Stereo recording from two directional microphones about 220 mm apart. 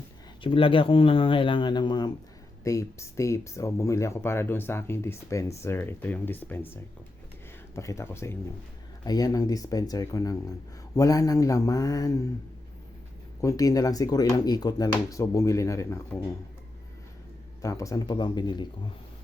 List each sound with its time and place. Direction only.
0.4 s speech: 25° left (ahead or behind)
7.8 s speech: 15° left (ahead or behind)
13.4 s speech: 15° left (ahead or behind)
17.6 s speech: 15° left (ahead or behind)